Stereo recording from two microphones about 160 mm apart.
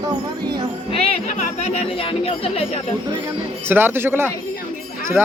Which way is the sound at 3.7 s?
15° right (ahead or behind).